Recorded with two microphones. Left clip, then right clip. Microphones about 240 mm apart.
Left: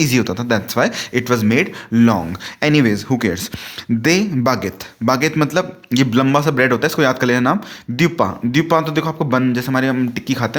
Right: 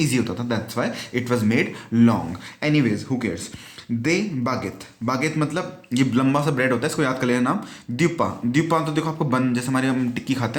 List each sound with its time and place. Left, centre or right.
0.0 s a man's voice: left